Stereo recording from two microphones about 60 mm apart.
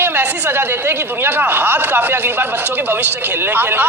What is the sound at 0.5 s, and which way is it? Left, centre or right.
Speech, right.